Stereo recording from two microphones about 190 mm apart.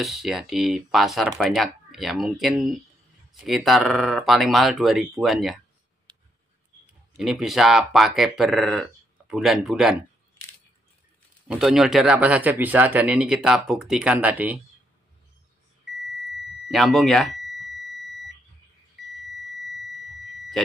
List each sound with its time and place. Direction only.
0.0 s speech: centre (ahead or behind)
6.1 s a sound: 25° right (ahead or behind)
7.2 s speech: centre (ahead or behind)
11.4 s speech: 5° right (ahead or behind)
16.6 s speech: centre (ahead or behind)
20.2 s ding: centre (ahead or behind)